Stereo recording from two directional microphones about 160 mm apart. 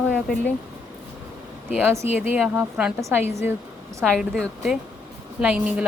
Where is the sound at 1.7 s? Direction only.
10° right (ahead or behind).